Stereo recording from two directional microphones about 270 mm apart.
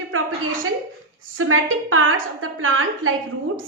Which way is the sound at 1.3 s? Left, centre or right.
Right.